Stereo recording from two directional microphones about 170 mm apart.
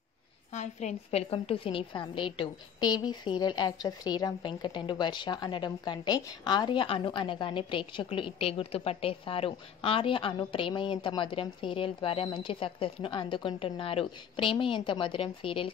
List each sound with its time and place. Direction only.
0.5 s a woman's voice: 40° left (ahead or behind)